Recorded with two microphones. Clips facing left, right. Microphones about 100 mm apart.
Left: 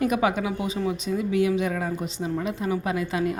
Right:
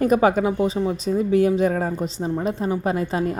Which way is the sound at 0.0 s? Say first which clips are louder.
Right 6 dB; 40° right (ahead or behind).